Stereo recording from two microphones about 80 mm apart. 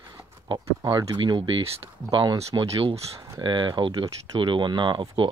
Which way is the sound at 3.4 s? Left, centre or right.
Right.